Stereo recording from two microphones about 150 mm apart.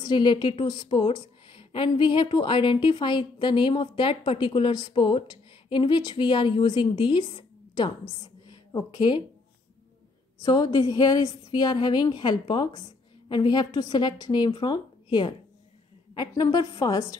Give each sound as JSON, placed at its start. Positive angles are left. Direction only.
{"t": 0.0, "sound": "a woman's voice", "side_deg": 30}
{"t": 8.2, "sound": "a sound", "side_deg": 25}
{"t": 10.4, "sound": "a woman's voice", "side_deg": 25}